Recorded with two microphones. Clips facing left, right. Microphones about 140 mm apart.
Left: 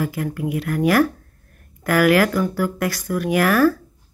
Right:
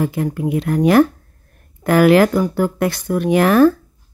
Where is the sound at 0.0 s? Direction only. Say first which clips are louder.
Right 4 dB; 25° right (ahead or behind).